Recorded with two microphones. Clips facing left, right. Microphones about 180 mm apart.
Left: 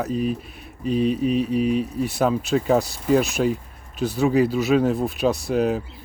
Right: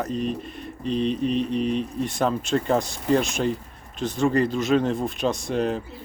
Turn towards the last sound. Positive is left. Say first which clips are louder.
# left 3 dB
turn(degrees=5)  # may be behind; listen again after turning